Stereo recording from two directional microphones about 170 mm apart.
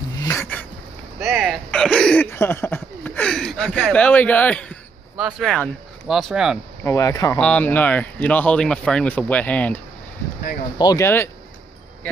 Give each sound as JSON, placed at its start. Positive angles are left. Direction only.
{"t": 0.2, "sound": "a sound", "side_deg": 15}
{"t": 1.2, "sound": "hiccup", "side_deg": 0}
{"t": 1.7, "sound": "a sound", "side_deg": 5}
{"t": 5.1, "sound": "speech", "side_deg": 0}
{"t": 6.8, "sound": "speech", "side_deg": 15}
{"t": 7.3, "sound": "speech", "side_deg": 5}
{"t": 10.8, "sound": "speech", "side_deg": 20}